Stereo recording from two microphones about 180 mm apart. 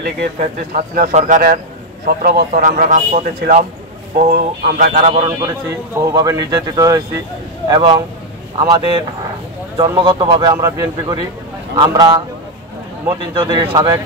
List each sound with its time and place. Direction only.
0.0 s speech: 50° right (ahead or behind)
5.0 s speech: 35° right (ahead or behind)
5.4 s a man's voice: 15° right (ahead or behind)